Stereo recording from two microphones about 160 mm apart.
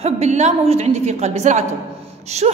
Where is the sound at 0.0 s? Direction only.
45° right (ahead or behind).